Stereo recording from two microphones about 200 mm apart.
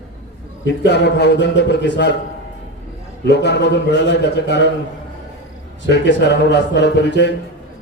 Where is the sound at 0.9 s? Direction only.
60° left (ahead or behind).